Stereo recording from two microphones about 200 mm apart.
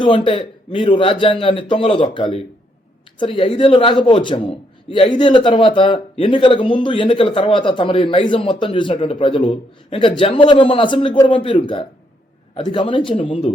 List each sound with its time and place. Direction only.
0.0 s a man's voice: 25° left (ahead or behind)